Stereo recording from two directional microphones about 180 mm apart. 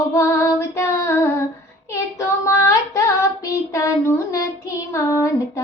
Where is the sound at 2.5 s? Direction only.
15° left (ahead or behind).